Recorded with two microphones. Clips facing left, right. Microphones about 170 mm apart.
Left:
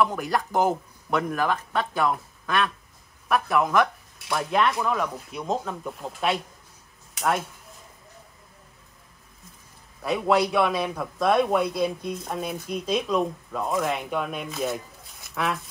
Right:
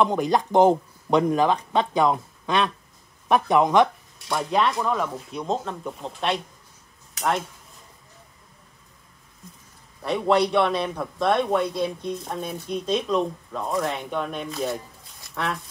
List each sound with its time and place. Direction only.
0.3 s speech: 20° right (ahead or behind)
3.6 s a man's voice: centre (ahead or behind)
10.0 s a man's voice: 5° left (ahead or behind)